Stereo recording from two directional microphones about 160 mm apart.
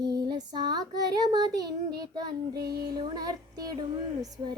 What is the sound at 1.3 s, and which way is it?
Child singing, 25° right (ahead or behind).